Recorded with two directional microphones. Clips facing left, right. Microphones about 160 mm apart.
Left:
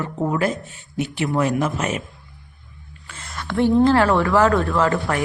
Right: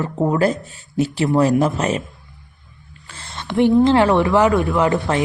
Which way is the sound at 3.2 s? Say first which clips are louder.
Right 3 dB; 25° right (ahead or behind).